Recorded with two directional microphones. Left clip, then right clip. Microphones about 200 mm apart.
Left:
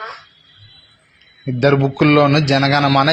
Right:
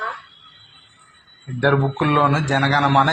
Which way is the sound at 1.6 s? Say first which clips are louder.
Left 4 dB; 50° left (ahead or behind).